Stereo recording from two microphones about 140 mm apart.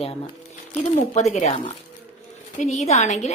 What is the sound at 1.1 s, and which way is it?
A woman's voice, 55° left (ahead or behind).